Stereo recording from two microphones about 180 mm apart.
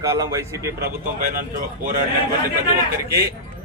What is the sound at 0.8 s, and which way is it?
Speech, 55° right (ahead or behind).